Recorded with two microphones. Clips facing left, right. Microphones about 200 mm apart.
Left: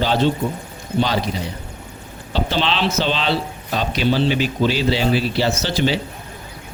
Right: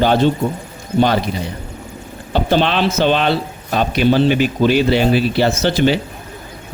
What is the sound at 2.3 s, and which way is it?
A man's voice, 50° right (ahead or behind).